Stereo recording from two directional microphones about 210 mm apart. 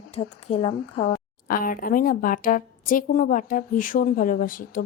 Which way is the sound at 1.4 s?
40° left (ahead or behind).